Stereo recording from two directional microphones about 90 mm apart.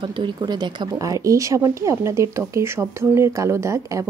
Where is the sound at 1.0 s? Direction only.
35° right (ahead or behind).